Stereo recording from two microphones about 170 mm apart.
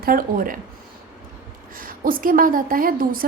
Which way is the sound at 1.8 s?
55° right (ahead or behind).